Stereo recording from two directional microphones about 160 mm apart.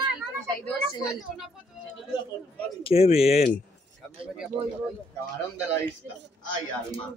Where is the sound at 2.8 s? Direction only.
40° left (ahead or behind).